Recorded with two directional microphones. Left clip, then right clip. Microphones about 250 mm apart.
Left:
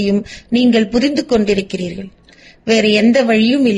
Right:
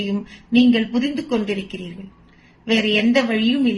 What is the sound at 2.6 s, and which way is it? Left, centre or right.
Speech, left.